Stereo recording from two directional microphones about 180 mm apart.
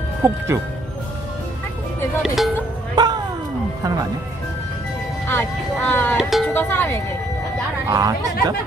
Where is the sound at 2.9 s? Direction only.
25° right (ahead or behind).